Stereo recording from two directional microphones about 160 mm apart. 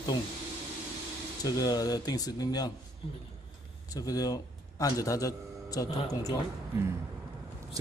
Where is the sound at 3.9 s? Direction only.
20° left (ahead or behind).